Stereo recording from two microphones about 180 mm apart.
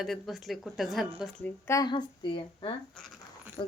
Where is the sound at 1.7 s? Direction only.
20° left (ahead or behind).